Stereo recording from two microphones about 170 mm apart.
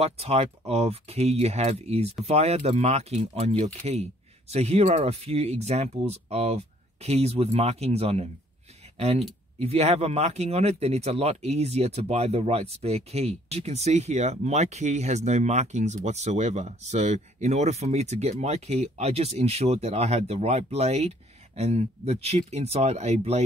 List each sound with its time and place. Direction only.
0.0 s speech: 35° right (ahead or behind)